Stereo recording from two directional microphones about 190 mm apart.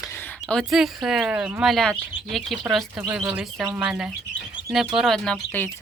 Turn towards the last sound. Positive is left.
turn(degrees=5)  # may be behind; listen again after turning